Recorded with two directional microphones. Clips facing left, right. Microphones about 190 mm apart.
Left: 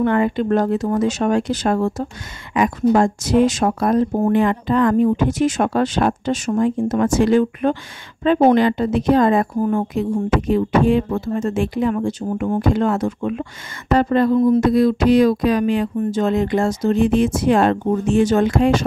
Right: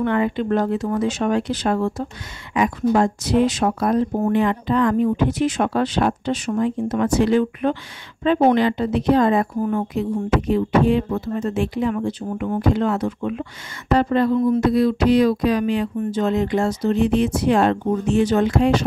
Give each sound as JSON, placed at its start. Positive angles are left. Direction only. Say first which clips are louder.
{"t": 0.0, "sound": "speech", "louder": "left 3 dB", "side_deg": 45}
{"t": 9.6, "sound": "speech", "louder": "left 3 dB", "side_deg": 35}
{"t": 9.9, "sound": "speech", "louder": "left 2 dB", "side_deg": 50}